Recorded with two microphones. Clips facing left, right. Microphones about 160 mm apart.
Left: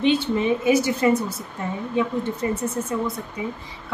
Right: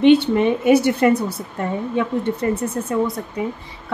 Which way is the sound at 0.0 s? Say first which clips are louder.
Right 7 dB; 60° right (ahead or behind).